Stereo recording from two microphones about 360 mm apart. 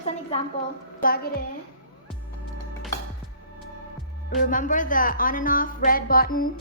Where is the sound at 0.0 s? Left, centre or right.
Centre.